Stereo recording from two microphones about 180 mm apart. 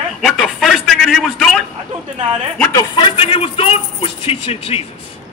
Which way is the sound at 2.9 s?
30° left (ahead or behind).